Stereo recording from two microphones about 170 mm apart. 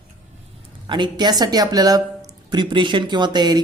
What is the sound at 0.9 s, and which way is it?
A woman's voice, 25° right (ahead or behind).